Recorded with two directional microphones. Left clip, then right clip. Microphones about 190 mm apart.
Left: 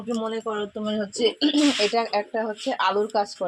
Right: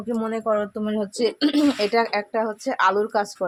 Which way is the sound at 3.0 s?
30° right (ahead or behind).